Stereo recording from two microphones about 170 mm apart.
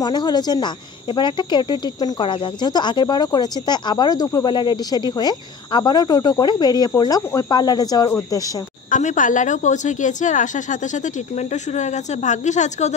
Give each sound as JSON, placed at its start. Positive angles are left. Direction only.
{"t": 0.0, "sound": "speech", "side_deg": 25}
{"t": 8.9, "sound": "a woman's voice", "side_deg": 50}